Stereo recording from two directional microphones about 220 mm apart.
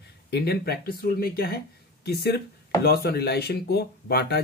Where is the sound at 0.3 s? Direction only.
45° left (ahead or behind).